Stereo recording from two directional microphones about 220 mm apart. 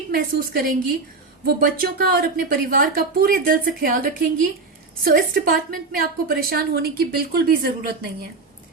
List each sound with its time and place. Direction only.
0.1 s a woman's voice: 40° right (ahead or behind)